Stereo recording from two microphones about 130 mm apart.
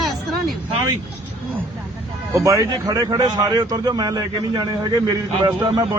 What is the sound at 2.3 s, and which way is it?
A man's voice, 25° right (ahead or behind).